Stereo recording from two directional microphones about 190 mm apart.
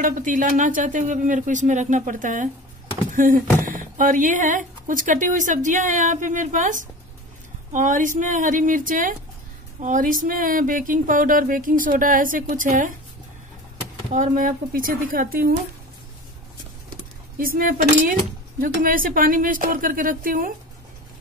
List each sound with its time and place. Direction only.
0.0 s speech: 45° right (ahead or behind)
14.1 s speech: 40° right (ahead or behind)
17.4 s speech: 45° right (ahead or behind)